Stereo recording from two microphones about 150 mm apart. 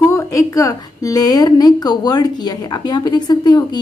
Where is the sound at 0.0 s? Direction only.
20° left (ahead or behind).